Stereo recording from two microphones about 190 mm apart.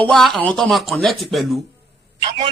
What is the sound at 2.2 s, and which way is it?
Speech, 25° right (ahead or behind).